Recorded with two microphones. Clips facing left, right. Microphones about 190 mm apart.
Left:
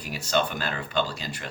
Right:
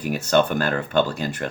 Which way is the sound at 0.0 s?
55° right (ahead or behind).